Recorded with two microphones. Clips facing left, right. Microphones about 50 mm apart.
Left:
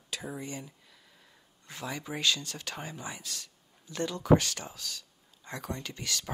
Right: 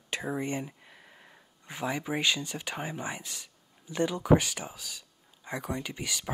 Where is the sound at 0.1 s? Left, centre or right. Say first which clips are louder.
Right 6 dB; right.